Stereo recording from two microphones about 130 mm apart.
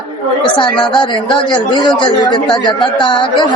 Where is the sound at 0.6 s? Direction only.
40° left (ahead or behind).